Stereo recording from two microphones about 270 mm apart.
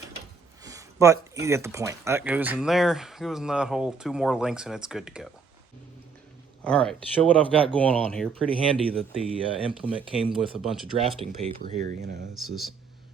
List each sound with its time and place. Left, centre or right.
0.6 s speech: centre
6.7 s speech: centre
11.2 s speech: right
11.8 s speech: right
12.3 s speech: centre